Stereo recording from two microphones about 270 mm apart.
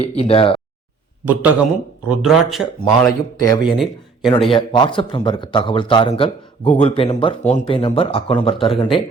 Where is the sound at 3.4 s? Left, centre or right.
Centre.